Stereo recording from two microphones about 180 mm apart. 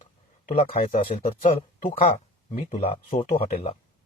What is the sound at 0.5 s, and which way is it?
Speech, 30° left (ahead or behind).